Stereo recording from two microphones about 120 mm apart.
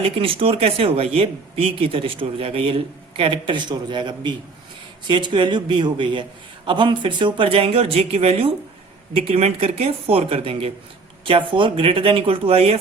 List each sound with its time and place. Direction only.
0.0 s speech: 50° right (ahead or behind)